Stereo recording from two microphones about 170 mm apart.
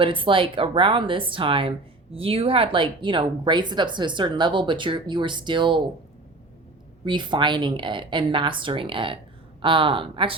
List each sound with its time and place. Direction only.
0.0 s speech: 30° right (ahead or behind)
7.0 s speech: 30° right (ahead or behind)